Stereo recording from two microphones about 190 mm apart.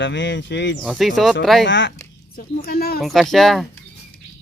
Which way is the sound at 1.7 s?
75° left (ahead or behind).